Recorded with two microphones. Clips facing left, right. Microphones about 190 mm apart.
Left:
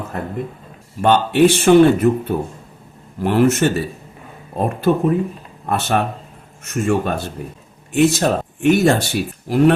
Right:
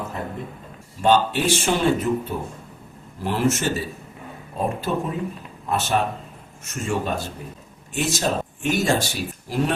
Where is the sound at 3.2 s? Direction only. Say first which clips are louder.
Left 7 dB; 60° left (ahead or behind).